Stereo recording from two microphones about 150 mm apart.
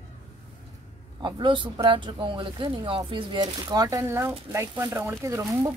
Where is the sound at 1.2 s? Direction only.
30° right (ahead or behind).